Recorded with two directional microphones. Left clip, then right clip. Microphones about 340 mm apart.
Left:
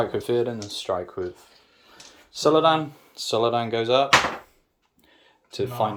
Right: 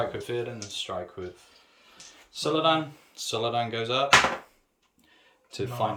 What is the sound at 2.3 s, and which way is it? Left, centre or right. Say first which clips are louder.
Speech: left 6 dB; centre.